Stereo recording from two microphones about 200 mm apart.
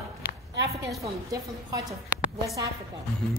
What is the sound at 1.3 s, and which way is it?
Speech, 15° right (ahead or behind).